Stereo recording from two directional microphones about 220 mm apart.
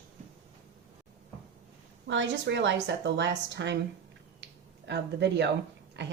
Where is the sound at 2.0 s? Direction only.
55° right (ahead or behind).